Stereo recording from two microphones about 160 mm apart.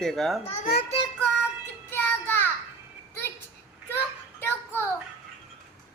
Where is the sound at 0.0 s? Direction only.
Centre (ahead or behind).